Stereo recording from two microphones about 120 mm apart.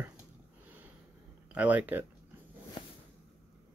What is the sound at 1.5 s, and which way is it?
Speech, 15° right (ahead or behind).